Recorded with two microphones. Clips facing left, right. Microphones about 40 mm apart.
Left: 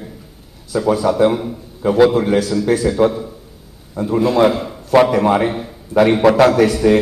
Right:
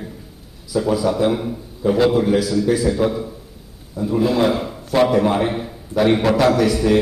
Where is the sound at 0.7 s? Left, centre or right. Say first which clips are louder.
Left 3 dB; left.